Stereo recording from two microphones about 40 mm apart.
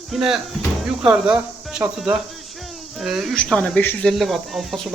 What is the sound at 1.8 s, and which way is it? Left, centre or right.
Speech, right.